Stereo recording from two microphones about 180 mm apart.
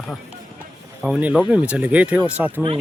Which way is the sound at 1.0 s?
5° right (ahead or behind).